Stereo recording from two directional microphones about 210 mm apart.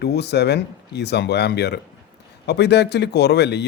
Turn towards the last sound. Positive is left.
turn(degrees=55)  # may be behind; listen again after turning